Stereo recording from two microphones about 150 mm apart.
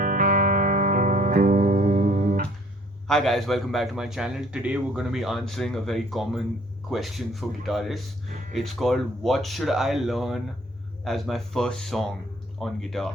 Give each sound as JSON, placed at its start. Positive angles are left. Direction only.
{"t": 0.0, "sound": "music", "side_deg": -60}
{"t": 3.1, "sound": "a man's voice", "side_deg": 0}